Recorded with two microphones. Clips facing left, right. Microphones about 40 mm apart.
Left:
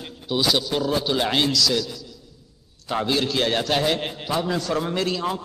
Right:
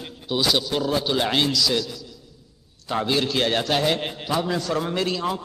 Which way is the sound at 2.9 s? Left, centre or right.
Centre.